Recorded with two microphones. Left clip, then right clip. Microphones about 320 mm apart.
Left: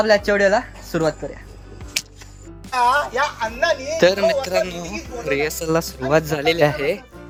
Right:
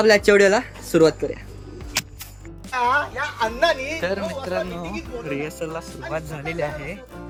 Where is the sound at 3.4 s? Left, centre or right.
Centre.